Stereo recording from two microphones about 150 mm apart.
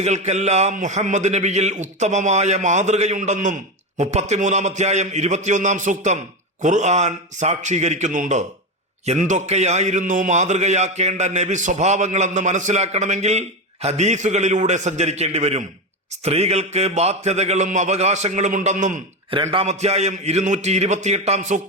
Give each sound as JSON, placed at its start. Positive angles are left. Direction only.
{"t": 0.0, "sound": "a man's voice", "side_deg": -50}
{"t": 19.3, "sound": "a man's voice", "side_deg": -35}